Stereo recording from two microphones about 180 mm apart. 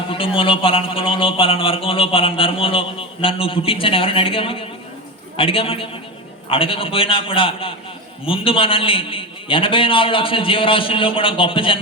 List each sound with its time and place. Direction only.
0.1 s a man's voice: 30° left (ahead or behind)